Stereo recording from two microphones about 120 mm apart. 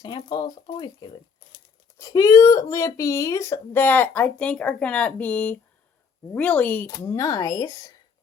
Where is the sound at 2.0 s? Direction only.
30° left (ahead or behind); by 6.8 s 15° left (ahead or behind).